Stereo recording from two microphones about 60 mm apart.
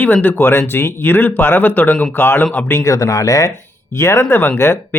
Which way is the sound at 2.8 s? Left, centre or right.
Left.